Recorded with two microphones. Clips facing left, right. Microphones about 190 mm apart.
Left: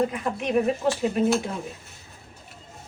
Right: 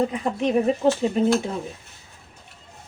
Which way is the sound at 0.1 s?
30° right (ahead or behind).